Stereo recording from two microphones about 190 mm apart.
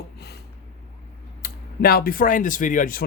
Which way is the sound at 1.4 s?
55° left (ahead or behind).